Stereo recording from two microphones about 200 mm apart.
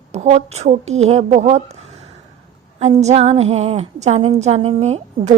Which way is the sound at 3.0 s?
35° right (ahead or behind).